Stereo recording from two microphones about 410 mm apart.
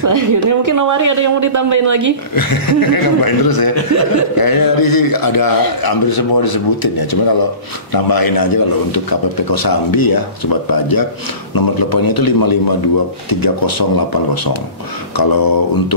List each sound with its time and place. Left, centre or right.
0.0 s speech: right
2.3 s a man's voice: left